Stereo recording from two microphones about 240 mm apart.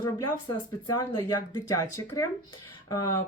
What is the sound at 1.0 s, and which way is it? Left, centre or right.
Speech, centre.